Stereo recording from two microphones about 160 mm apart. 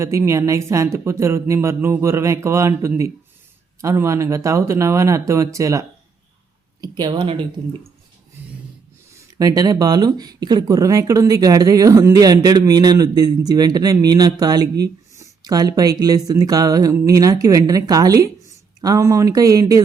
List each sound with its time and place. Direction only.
0.0 s speech: 15° right (ahead or behind)
6.8 s speech: 25° right (ahead or behind)
9.4 s speech: 25° right (ahead or behind)